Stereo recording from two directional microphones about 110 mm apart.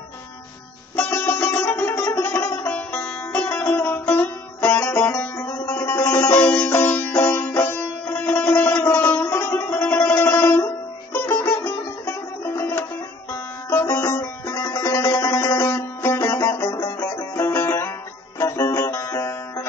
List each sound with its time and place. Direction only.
0.9 s music: 20° left (ahead or behind)